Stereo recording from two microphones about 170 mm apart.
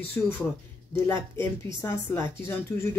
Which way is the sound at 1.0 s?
15° left (ahead or behind).